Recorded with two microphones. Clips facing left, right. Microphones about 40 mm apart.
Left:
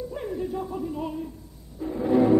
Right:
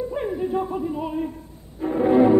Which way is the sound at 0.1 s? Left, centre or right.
Right.